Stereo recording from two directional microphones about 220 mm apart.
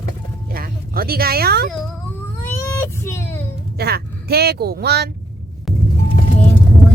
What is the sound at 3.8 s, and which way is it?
Speech, 45° right (ahead or behind).